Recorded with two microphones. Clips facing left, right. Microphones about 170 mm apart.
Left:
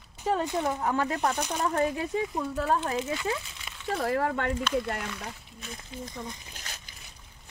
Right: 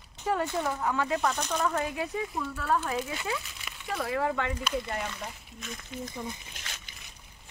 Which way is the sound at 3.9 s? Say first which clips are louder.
Left 2 dB; 45° left (ahead or behind).